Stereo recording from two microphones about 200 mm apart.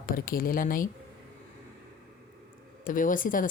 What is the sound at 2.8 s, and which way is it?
Speech, 40° left (ahead or behind).